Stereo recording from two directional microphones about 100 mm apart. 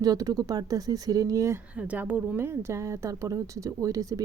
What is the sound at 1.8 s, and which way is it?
A woman's voice, 15° right (ahead or behind).